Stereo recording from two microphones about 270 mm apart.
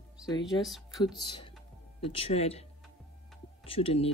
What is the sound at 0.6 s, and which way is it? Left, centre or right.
Speech, centre.